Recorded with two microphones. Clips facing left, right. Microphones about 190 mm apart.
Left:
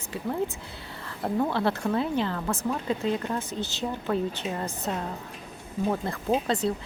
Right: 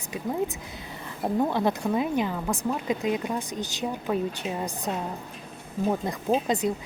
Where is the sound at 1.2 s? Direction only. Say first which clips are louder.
Right 1 dB; 15° right (ahead or behind).